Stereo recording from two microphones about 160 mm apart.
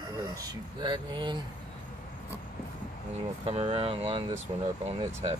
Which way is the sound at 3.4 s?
40° right (ahead or behind).